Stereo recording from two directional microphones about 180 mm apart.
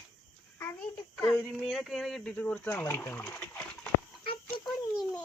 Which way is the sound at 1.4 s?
Centre (ahead or behind).